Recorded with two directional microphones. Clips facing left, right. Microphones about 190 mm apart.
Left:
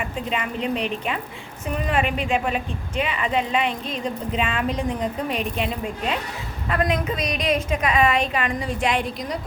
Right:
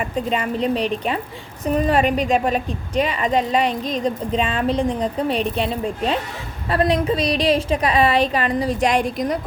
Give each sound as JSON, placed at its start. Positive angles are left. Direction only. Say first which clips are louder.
{"t": 0.3, "sound": "a woman's voice", "louder": "right 4 dB", "side_deg": -35}